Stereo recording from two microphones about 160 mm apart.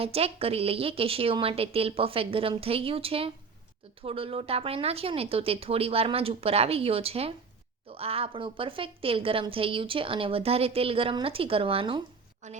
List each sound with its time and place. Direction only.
0.0 s a woman's voice: 40° right (ahead or behind)
12.4 s a woman's voice: 45° right (ahead or behind)